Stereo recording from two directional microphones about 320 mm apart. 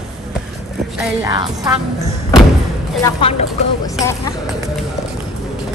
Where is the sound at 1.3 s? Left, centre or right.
Centre.